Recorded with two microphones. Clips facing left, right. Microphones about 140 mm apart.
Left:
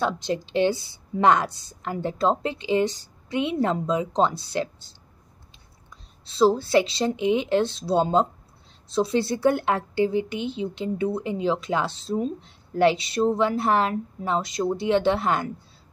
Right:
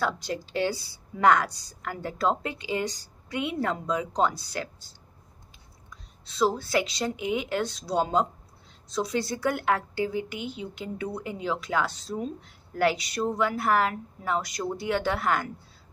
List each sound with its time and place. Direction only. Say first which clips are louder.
0.0 s speech: left 4 dB; 25° left (ahead or behind)